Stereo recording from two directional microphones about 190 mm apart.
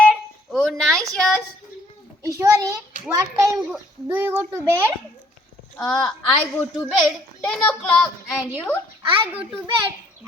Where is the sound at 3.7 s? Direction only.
5° right (ahead or behind).